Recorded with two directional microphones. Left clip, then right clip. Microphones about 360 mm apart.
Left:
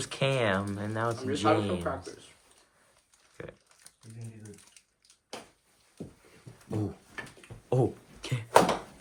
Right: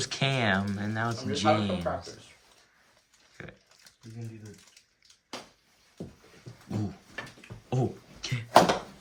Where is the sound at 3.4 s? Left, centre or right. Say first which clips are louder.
Left 2 dB; centre.